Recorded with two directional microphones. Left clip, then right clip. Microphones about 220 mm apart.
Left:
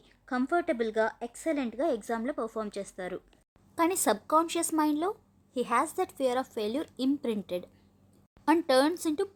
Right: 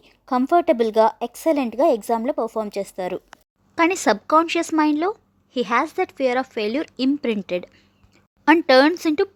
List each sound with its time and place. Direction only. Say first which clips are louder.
0.0 s speech: right 10 dB; 30° right (ahead or behind)